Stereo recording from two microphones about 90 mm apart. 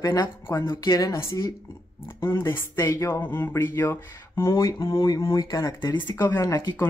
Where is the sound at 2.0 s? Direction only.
25° left (ahead or behind).